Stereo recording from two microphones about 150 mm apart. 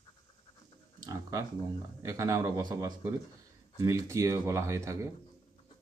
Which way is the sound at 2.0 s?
25° right (ahead or behind).